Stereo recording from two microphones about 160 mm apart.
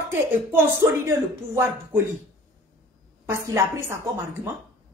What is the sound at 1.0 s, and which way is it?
Speech, 15° right (ahead or behind).